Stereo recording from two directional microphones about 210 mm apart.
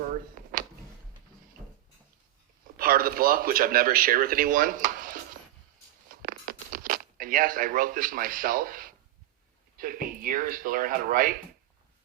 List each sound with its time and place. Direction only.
2.7 s speech: 45° right (ahead or behind)
6.1 s a sound: 40° right (ahead or behind)
9.7 s speech: 40° right (ahead or behind)